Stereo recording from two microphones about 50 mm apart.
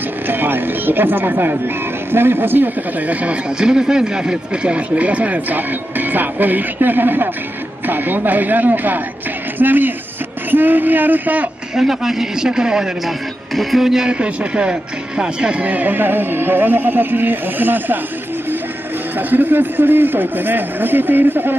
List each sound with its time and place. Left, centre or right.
0.3 s speech: right
3.4 s speech: centre; by 11.4 s right
11.7 s a man's voice: centre
13.6 s a man's voice: centre
14.1 s speech: right
19.1 s speech: right